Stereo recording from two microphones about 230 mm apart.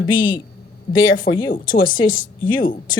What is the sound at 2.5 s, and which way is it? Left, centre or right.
Speech, left.